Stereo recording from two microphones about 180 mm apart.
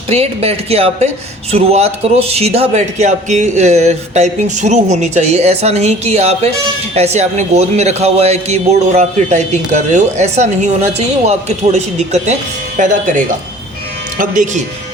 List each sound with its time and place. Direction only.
0.1 s a man's voice: 35° right (ahead or behind)